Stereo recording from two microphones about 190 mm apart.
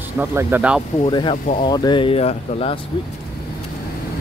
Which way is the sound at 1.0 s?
25° left (ahead or behind).